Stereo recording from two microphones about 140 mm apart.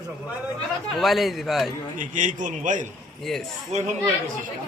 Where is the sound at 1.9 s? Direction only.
65° right (ahead or behind).